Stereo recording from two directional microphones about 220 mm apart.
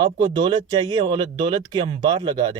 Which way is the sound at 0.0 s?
20° right (ahead or behind).